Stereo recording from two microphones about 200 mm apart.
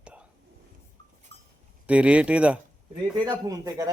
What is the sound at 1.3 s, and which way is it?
Goat, 60° right (ahead or behind).